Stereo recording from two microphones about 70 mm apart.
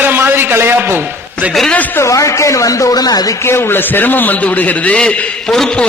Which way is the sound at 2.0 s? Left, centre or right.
Left.